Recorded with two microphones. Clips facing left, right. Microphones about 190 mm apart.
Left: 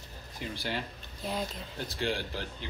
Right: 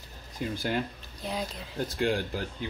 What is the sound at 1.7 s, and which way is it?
Speech, 50° right (ahead or behind).